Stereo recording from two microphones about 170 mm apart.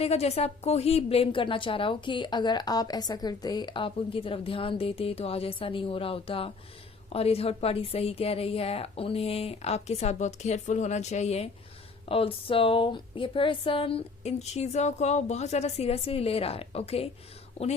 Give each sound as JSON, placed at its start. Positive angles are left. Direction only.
{"t": 0.0, "sound": "a woman's voice", "side_deg": 35}